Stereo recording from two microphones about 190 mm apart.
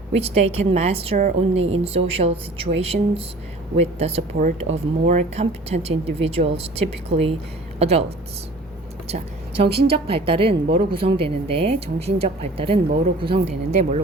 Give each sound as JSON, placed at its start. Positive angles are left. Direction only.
{"t": 0.2, "sound": "a woman's voice", "side_deg": -30}
{"t": 9.9, "sound": "speech", "side_deg": -30}